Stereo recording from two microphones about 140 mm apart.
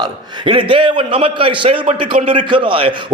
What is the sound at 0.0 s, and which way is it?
A man's voice, 35° right (ahead or behind).